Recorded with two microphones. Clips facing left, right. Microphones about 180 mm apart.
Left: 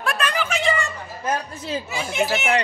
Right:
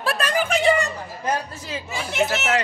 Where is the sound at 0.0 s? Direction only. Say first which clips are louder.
Right 2 dB; 35° right (ahead or behind).